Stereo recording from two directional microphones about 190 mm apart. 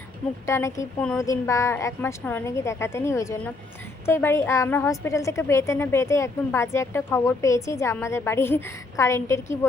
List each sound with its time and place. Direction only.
0.4 s a woman's voice: 15° left (ahead or behind)